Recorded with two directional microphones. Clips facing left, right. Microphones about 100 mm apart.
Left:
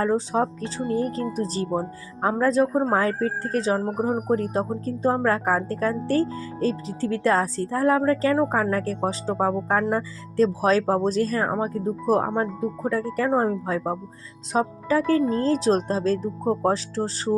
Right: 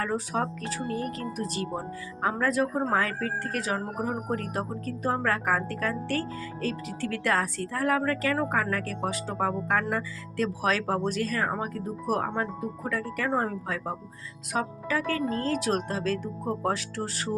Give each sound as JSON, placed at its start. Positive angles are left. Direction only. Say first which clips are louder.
{"t": 0.0, "sound": "speech", "louder": "left 6 dB", "side_deg": 25}